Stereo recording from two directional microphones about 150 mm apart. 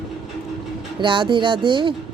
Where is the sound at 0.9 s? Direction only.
35° right (ahead or behind).